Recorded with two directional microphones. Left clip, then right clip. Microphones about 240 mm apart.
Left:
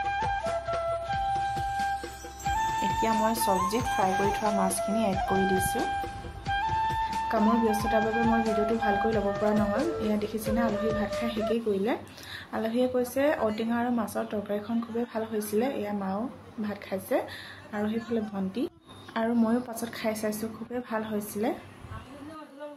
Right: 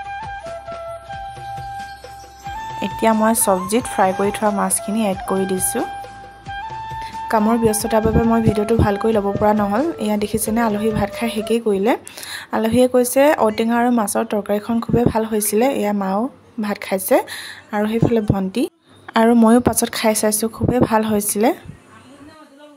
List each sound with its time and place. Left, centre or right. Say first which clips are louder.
0.0 s music: even; centre
3.0 s speech: right 13 dB; right
6.4 s music: left 1 dB; centre
7.2 s speech: right 11 dB; right